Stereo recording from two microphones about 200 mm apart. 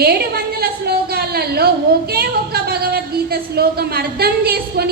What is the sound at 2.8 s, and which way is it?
A woman's voice, 50° right (ahead or behind).